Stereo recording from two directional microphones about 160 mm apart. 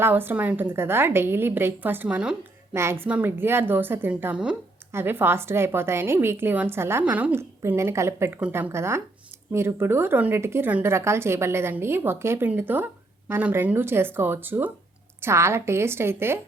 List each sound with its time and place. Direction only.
0.0 s a woman's voice: 15° right (ahead or behind)